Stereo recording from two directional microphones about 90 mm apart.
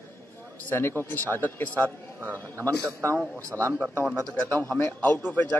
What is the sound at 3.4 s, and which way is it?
Speech, 35° right (ahead or behind).